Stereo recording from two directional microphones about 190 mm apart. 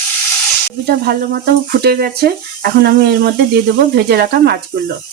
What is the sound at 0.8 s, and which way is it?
Speech, 55° right (ahead or behind).